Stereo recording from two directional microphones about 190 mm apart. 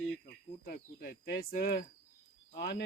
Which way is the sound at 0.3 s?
50° left (ahead or behind).